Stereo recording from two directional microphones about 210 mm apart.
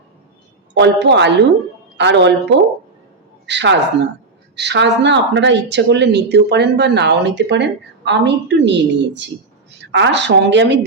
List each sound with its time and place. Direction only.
0.7 s speech: 55° right (ahead or behind)